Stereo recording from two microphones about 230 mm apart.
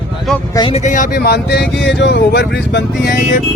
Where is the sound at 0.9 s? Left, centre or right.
Left.